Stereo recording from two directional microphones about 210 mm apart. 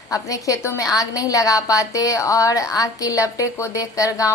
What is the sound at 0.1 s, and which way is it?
A woman's voice, 15° left (ahead or behind).